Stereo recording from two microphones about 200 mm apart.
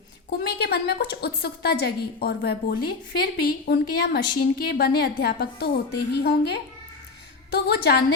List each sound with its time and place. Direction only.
0.3 s a woman's voice: 55° left (ahead or behind)